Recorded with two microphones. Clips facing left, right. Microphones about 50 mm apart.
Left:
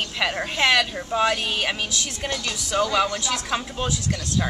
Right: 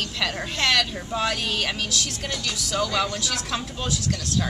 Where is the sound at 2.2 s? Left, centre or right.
Centre.